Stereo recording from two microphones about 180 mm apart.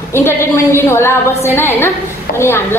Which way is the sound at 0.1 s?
15° left (ahead or behind).